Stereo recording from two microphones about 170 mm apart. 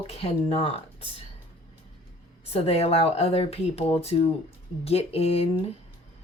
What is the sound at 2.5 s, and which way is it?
Speech, 35° left (ahead or behind).